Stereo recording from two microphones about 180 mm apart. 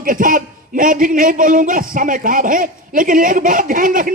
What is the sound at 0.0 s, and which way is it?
A man's voice, 50° right (ahead or behind).